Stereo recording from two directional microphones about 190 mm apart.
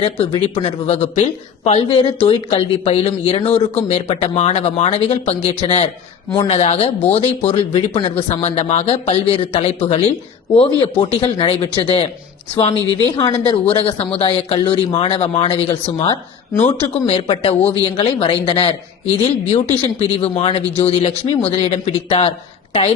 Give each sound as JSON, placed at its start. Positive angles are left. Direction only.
{"t": 0.0, "sound": "speech", "side_deg": 30}
{"t": 13.1, "sound": "speech", "side_deg": 25}
{"t": 17.1, "sound": "speech", "side_deg": 25}